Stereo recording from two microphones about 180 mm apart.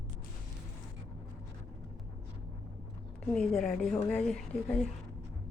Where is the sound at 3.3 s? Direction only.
5° left (ahead or behind).